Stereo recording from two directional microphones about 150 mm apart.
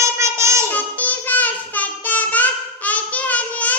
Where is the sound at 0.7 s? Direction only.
10° left (ahead or behind).